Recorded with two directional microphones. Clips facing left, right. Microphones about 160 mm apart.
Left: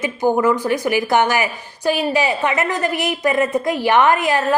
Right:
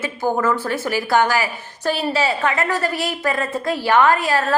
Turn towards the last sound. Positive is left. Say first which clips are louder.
# left 1 dB
turn(degrees=20)  # may be behind; listen again after turning